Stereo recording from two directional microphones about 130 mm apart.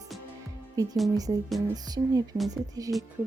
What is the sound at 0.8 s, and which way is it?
Speech, 25° right (ahead or behind).